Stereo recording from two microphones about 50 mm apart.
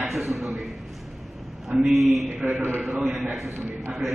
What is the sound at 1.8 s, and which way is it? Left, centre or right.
Speech, centre.